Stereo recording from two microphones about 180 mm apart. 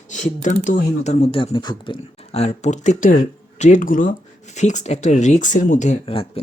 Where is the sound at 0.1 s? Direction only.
45° left (ahead or behind).